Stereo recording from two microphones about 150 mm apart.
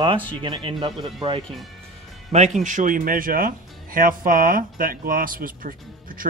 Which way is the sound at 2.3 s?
50° right (ahead or behind).